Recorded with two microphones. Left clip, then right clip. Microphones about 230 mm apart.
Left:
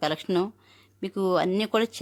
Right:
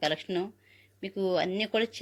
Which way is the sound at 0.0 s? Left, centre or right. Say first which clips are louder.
Left 4 dB; centre.